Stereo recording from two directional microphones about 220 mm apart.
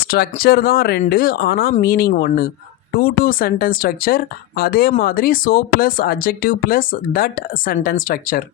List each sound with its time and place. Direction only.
0.1 s speech: 45° left (ahead or behind)